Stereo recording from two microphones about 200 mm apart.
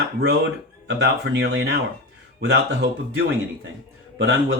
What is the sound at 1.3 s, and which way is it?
Speech, 55° right (ahead or behind).